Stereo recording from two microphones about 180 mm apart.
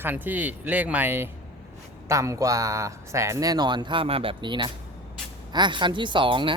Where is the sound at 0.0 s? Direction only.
10° right (ahead or behind).